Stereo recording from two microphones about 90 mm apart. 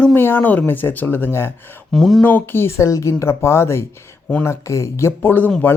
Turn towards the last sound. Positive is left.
turn(degrees=20)  # may be behind; listen again after turning